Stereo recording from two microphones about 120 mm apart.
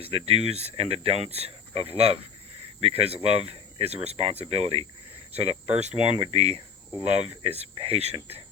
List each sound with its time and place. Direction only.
0.0 s speech: 55° right (ahead or behind)